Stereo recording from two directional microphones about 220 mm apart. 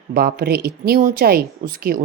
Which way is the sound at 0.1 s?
45° right (ahead or behind).